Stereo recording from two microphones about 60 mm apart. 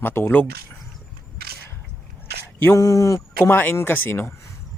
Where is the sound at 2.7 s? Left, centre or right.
Left.